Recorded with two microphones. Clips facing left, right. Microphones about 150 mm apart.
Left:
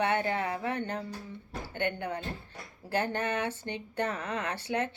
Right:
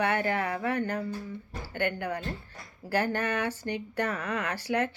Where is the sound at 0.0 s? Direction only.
25° left (ahead or behind).